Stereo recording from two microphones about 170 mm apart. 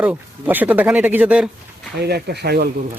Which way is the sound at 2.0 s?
75° right (ahead or behind).